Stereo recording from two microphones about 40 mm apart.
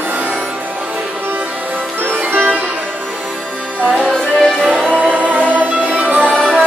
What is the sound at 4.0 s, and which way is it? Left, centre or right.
Music, centre.